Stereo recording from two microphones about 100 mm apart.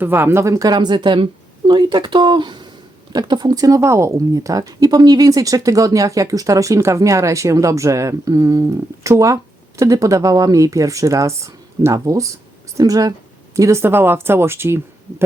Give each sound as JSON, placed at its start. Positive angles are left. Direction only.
{"t": 0.0, "sound": "speech", "side_deg": -20}
{"t": 13.6, "sound": "speech", "side_deg": -30}